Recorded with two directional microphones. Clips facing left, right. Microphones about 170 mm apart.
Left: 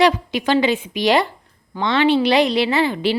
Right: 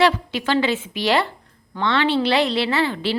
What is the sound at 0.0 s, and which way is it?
Speech, 15° left (ahead or behind).